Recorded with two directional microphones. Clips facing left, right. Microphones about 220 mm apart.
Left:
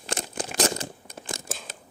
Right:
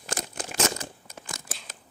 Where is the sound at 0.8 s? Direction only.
30° left (ahead or behind).